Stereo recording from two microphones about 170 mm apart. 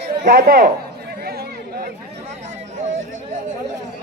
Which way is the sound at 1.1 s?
70° right (ahead or behind).